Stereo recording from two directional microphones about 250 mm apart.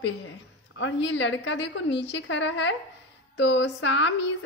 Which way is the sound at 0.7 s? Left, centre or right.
Left.